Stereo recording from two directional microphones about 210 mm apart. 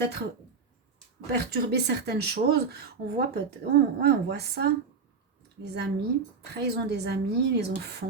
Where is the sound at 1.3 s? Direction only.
50° right (ahead or behind).